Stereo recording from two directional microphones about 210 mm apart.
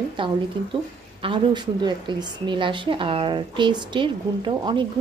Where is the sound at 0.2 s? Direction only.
25° right (ahead or behind).